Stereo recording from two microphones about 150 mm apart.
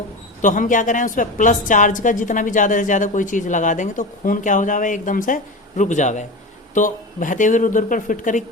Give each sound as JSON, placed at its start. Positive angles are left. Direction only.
{"t": 0.4, "sound": "a woman's voice", "side_deg": 60}